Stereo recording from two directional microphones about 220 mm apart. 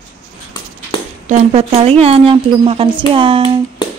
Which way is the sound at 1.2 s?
30° right (ahead or behind).